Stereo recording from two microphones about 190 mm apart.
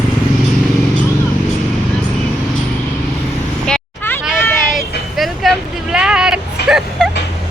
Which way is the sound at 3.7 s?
10° left (ahead or behind).